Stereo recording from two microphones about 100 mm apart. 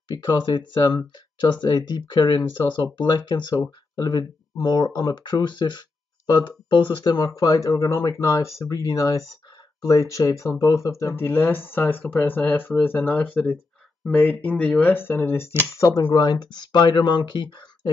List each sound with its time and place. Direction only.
0.1 s speech: 40° left (ahead or behind); by 15.4 s 25° left (ahead or behind)
15.8 s speech: 40° left (ahead or behind)